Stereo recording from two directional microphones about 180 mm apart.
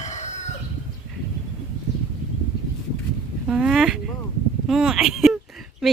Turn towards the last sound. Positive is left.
turn(degrees=0)  # may be behind; listen again after turning